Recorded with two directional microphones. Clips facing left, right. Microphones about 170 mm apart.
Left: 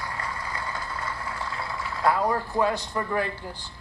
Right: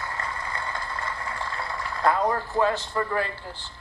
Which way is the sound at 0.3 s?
10° left (ahead or behind).